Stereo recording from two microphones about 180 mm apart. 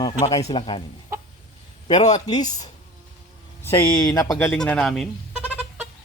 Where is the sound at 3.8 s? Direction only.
25° left (ahead or behind).